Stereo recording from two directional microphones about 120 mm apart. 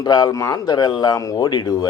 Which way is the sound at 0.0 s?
35° left (ahead or behind).